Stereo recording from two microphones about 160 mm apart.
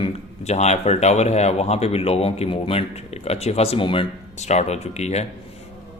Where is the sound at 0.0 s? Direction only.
45° left (ahead or behind).